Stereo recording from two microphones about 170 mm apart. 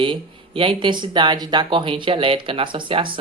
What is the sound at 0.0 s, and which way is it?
Speech, 30° right (ahead or behind).